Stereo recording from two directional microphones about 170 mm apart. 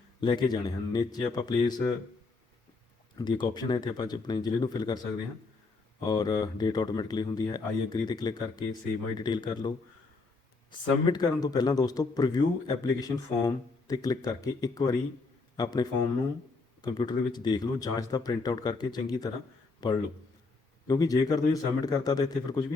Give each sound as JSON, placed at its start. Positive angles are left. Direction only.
{"t": 0.2, "sound": "speech", "side_deg": 25}
{"t": 3.2, "sound": "speech", "side_deg": 25}
{"t": 6.0, "sound": "speech", "side_deg": 25}